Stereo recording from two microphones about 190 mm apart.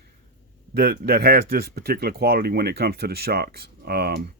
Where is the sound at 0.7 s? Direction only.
55° right (ahead or behind).